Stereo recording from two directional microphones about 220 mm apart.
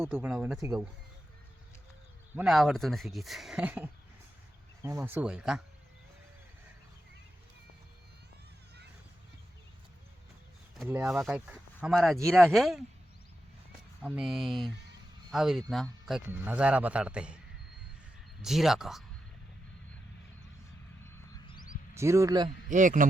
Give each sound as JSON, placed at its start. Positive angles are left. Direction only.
{"t": 0.1, "sound": "a man's voice", "side_deg": -5}
{"t": 2.3, "sound": "a man's voice", "side_deg": 0}
{"t": 10.8, "sound": "a man's voice", "side_deg": -10}
{"t": 14.0, "sound": "a man's voice", "side_deg": 0}
{"t": 18.4, "sound": "a man's voice", "side_deg": 0}
{"t": 21.9, "sound": "speech", "side_deg": -10}
{"t": 22.4, "sound": "speech", "side_deg": -35}